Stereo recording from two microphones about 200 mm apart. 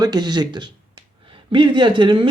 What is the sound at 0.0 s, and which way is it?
Speech, 20° right (ahead or behind).